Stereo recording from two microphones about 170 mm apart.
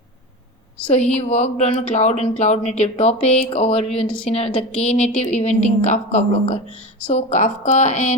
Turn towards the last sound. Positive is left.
turn(degrees=45)  # may be behind; listen again after turning